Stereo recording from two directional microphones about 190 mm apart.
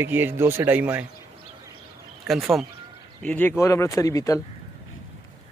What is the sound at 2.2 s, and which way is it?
A man's voice, centre (ahead or behind).